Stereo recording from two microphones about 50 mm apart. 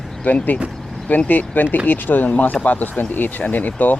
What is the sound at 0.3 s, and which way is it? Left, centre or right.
Speech, left.